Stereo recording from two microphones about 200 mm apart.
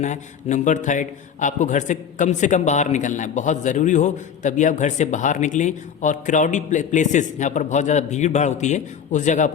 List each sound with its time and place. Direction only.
0.0 s a man's voice: 35° left (ahead or behind)